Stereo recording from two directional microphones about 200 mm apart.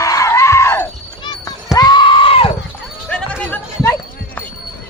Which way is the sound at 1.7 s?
20° left (ahead or behind).